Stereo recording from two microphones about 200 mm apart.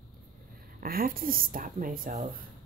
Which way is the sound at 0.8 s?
45° right (ahead or behind).